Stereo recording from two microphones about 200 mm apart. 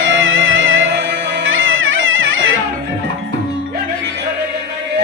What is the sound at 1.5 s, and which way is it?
Music, 75° right (ahead or behind).